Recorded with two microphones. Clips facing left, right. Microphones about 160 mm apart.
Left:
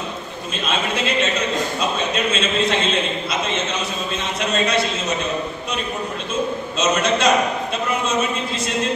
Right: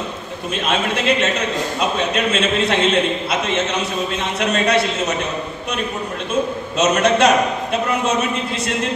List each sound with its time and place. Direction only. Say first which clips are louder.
0.7 s a man's voice: right 4 dB; 65° right (ahead or behind)
6.8 s a man's voice: right 4 dB; 65° right (ahead or behind)